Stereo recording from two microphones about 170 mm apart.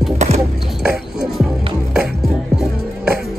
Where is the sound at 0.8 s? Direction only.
Centre (ahead or behind).